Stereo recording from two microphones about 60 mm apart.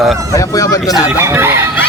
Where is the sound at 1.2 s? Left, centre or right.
Right.